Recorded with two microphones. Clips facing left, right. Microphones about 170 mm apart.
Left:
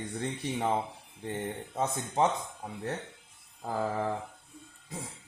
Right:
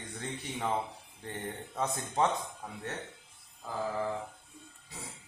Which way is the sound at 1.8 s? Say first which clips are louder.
Left 2 dB; 20° left (ahead or behind).